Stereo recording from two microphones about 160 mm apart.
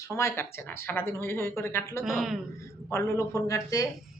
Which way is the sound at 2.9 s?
15° left (ahead or behind).